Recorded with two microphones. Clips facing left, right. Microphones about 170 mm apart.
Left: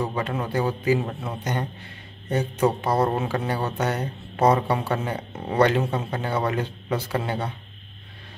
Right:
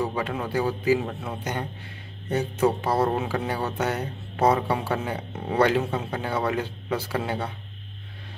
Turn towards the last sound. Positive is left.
turn(degrees=-5)  # may be behind; listen again after turning